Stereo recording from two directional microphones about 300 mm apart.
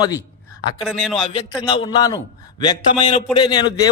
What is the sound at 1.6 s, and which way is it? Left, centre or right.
A man's voice, centre.